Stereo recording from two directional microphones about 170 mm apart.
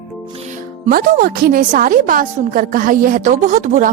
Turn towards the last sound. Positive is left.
turn(degrees=-45)  # may be behind; listen again after turning